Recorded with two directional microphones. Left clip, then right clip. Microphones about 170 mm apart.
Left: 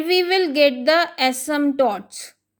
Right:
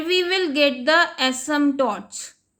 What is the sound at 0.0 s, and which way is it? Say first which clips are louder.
A woman's voice: left 2 dB; 20° left (ahead or behind).